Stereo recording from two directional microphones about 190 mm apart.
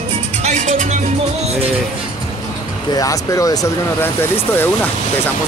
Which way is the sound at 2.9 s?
20° left (ahead or behind).